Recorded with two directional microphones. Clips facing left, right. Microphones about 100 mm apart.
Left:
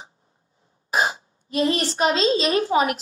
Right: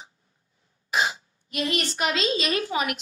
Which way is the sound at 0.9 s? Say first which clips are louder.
Left 3 dB; 40° left (ahead or behind).